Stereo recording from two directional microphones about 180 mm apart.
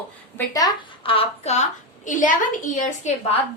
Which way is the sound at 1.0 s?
30° left (ahead or behind).